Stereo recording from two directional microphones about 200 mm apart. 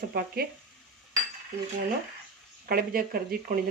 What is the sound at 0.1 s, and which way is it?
Speech, 50° right (ahead or behind).